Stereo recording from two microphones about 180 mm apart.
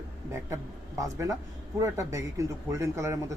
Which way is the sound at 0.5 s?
15° right (ahead or behind).